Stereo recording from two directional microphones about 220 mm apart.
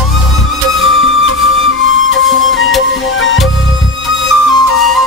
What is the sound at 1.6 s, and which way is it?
Flute, 60° left (ahead or behind).